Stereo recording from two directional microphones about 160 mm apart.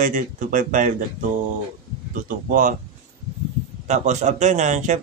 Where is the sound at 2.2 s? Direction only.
55° right (ahead or behind).